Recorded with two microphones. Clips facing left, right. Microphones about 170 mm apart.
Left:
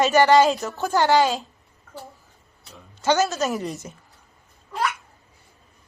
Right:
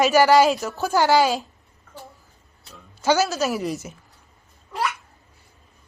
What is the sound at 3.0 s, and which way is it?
Speech, centre (ahead or behind).